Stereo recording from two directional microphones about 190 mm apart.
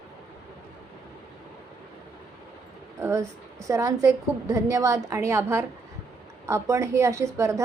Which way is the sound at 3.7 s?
15° right (ahead or behind).